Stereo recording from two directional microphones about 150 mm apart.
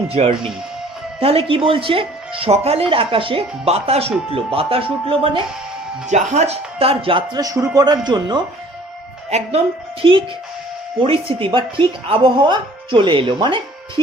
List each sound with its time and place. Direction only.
0.1 s speech: 40° right (ahead or behind)
6.1 s speech: 50° right (ahead or behind); by 7.4 s 35° right (ahead or behind)
7.4 s a man's voice: 20° right (ahead or behind)
9.3 s speech: 45° right (ahead or behind)